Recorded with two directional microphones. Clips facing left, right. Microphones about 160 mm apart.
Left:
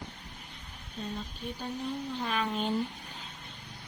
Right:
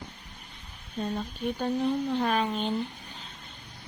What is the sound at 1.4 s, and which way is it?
Speech, 60° right (ahead or behind).